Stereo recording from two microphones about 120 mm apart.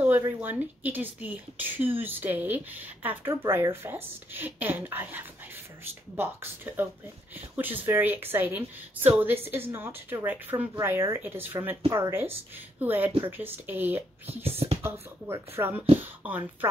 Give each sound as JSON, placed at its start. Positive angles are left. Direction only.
{"t": 0.4, "sound": "speech", "side_deg": -15}
{"t": 14.2, "sound": "speech", "side_deg": -55}
{"t": 14.8, "sound": "speech", "side_deg": -20}